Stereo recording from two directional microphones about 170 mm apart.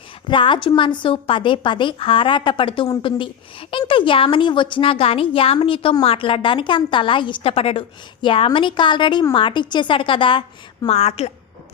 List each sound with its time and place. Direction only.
0.3 s a woman's voice: 30° left (ahead or behind)